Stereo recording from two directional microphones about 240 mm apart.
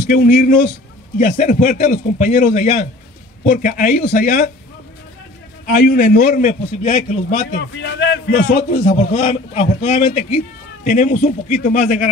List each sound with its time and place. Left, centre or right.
0.0 s a man's voice: left
5.7 s a man's voice: left
8.5 s a man's voice: left